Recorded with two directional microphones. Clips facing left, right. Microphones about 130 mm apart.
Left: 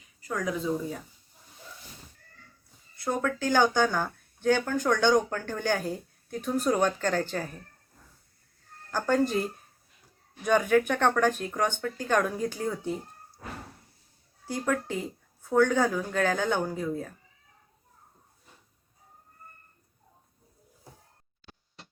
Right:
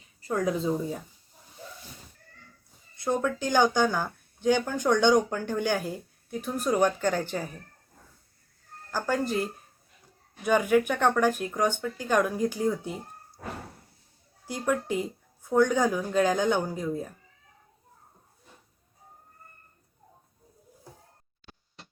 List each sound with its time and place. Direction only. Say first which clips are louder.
0.2 s speech: right 4 dB; 30° right (ahead or behind)
2.9 s speech: right 2 dB; 20° right (ahead or behind)
8.9 s speech: left 2 dB; 5° right (ahead or behind)
14.4 s speech: right 1 dB; 15° right (ahead or behind)